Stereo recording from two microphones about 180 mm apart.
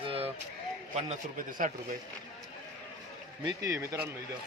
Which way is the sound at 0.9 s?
45° right (ahead or behind).